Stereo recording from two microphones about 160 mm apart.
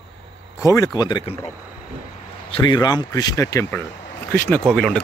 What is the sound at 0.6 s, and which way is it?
Speech, 20° left (ahead or behind).